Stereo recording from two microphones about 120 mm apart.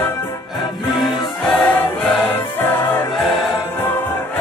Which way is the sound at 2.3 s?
15° left (ahead or behind).